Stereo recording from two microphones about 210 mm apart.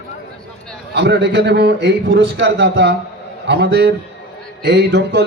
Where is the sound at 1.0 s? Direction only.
55° right (ahead or behind).